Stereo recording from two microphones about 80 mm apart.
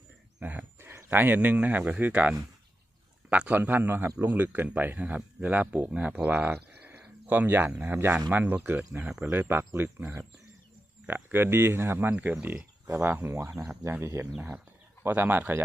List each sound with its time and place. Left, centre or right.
0.3 s speech: right
6.7 s a sound: right
8.3 s speech: right
9.0 s speech: centre
9.3 s speech: right
11.1 s speech: right
14.3 s speech: centre